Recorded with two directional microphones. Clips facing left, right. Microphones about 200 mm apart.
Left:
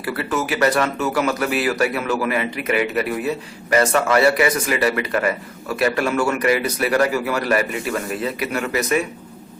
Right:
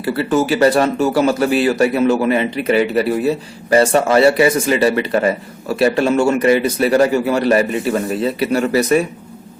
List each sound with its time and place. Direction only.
0.0 s speech: 30° right (ahead or behind)